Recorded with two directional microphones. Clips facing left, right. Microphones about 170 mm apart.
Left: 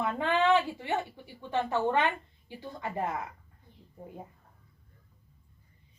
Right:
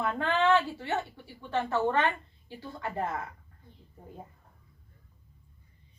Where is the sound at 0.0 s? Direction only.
15° left (ahead or behind).